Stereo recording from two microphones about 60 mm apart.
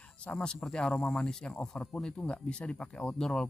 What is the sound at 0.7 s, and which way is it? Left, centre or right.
Speech, centre.